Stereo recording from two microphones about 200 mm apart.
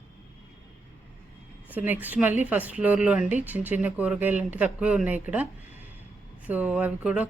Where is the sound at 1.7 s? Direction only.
10° right (ahead or behind).